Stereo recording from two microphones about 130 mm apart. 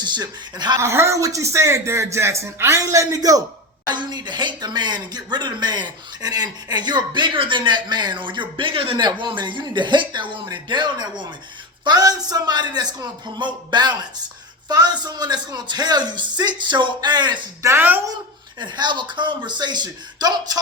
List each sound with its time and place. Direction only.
0.0 s speech: 35° right (ahead or behind)
0.8 s a man's voice: 20° right (ahead or behind)
17.6 s speech: 20° right (ahead or behind)
18.6 s speech: 35° right (ahead or behind)